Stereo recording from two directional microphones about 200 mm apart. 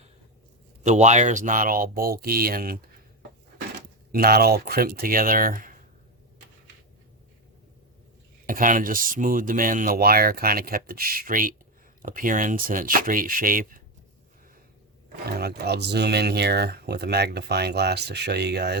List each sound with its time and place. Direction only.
0.9 s speech: 35° right (ahead or behind)
4.1 s speech: 50° right (ahead or behind)
8.4 s speech: 40° right (ahead or behind)
15.3 s speech: 50° right (ahead or behind)